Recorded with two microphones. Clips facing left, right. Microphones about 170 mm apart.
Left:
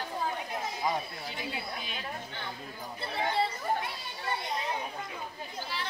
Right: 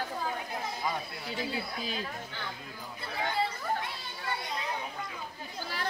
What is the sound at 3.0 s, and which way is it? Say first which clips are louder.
Speech: left 2 dB; 25° left (ahead or behind).